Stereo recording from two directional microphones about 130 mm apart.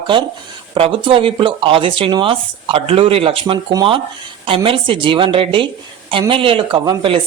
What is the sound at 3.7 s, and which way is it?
Speech, 30° right (ahead or behind).